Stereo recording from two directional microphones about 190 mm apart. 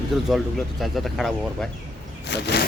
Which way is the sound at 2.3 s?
60° left (ahead or behind).